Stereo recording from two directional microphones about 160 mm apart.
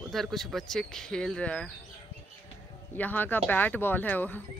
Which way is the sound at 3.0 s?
10° left (ahead or behind).